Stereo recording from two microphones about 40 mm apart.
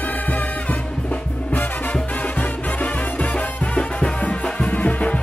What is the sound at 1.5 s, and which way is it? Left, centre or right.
Music, left.